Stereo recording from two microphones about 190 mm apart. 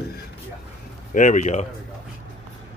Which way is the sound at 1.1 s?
40° left (ahead or behind).